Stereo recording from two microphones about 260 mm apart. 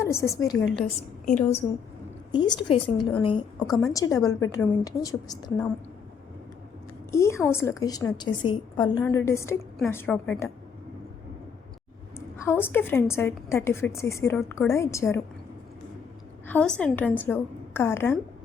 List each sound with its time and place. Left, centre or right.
0.0 s a woman's voice: centre
1.2 s a woman's voice: left
3.7 s a woman's voice: centre
3.9 s a woman's voice: centre
7.1 s a woman's voice: centre
12.5 s a woman's voice: centre
16.5 s a woman's voice: centre